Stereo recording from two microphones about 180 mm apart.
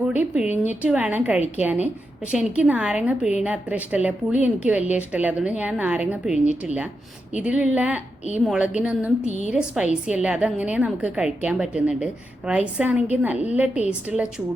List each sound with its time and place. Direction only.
0.1 s a woman's voice: 10° right (ahead or behind)
6.3 s speech: 40° left (ahead or behind)
7.3 s a woman's voice: 5° right (ahead or behind)
9.2 s speech: 40° left (ahead or behind)
9.5 s a woman's voice: 5° right (ahead or behind)